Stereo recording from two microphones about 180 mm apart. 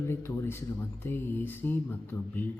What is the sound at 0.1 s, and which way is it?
Speech, 15° left (ahead or behind).